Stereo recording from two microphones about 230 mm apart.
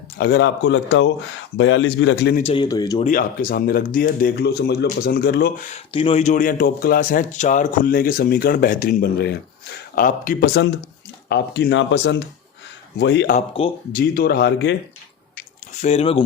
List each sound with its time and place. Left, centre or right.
0.2 s speech: left
2.3 s speech: left
3.0 s speech: left
5.7 s speech: left
13.3 s speech: left
13.9 s speech: left
15.8 s speech: left